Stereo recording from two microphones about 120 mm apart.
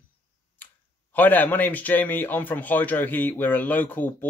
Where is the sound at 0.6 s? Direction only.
15° left (ahead or behind).